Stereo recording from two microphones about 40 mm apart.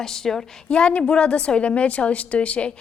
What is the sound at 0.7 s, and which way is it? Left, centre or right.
A woman's voice, left.